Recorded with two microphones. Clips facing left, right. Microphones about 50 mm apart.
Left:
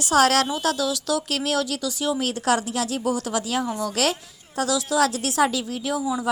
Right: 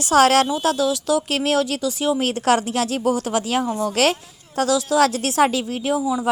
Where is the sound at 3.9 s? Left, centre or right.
Right.